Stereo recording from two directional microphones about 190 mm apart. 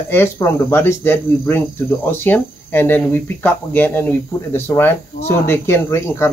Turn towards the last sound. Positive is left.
turn(degrees=15)  # may be behind; listen again after turning